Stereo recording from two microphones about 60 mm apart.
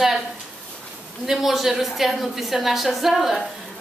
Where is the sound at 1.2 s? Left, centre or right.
Centre.